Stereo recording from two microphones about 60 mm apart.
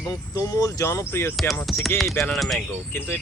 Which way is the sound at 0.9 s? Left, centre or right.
Left.